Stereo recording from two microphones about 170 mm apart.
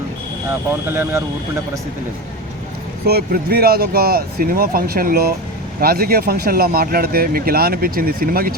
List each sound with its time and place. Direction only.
3.1 s speech: 70° right (ahead or behind)